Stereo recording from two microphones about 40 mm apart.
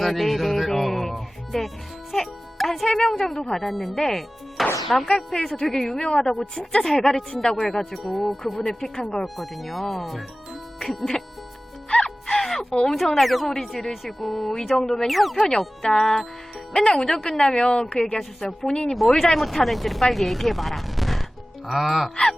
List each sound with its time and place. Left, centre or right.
0.0 s music: centre
2.8 s a woman's voice: centre
3.6 s speech: centre
5.0 s a woman's voice: centre
8.6 s a woman's voice: centre
9.2 s speech: centre
10.8 s music: centre
11.9 s music: left
12.2 s a sound: centre
12.9 s speech: centre
15.4 s a woman's voice: centre
19.0 s speech: centre
22.1 s speech: centre